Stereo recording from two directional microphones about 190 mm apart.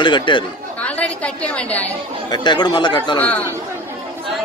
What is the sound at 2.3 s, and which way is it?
Speech, 20° left (ahead or behind).